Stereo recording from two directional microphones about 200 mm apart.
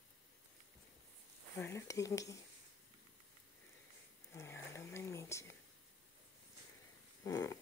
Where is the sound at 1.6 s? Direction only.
15° left (ahead or behind).